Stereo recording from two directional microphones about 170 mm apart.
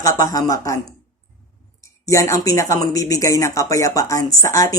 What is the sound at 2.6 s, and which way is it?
Speech, 20° left (ahead or behind).